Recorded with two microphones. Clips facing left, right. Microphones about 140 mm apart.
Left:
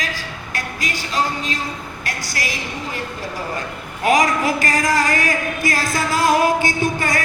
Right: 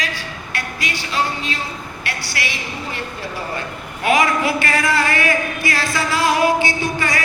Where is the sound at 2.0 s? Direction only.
40° left (ahead or behind).